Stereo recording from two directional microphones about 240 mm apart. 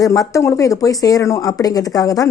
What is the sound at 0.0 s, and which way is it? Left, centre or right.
Speech, centre.